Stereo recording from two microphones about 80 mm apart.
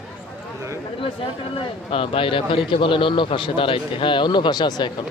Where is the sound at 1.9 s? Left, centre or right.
Left.